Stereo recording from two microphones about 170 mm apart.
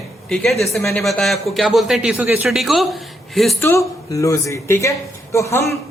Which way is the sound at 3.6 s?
15° left (ahead or behind).